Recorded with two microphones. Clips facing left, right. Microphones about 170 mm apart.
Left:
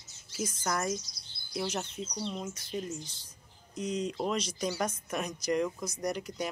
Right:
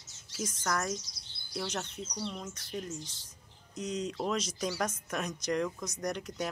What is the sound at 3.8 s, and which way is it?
Speech, centre (ahead or behind).